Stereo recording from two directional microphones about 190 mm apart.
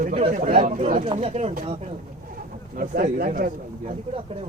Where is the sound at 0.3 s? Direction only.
45° right (ahead or behind).